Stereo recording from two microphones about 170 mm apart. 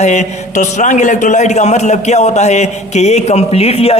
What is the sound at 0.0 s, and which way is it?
A man's voice, 45° left (ahead or behind).